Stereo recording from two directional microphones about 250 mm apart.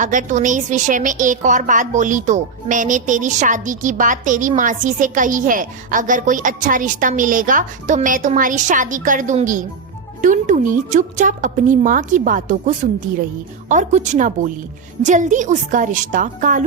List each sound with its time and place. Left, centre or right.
0.0 s a woman's voice: right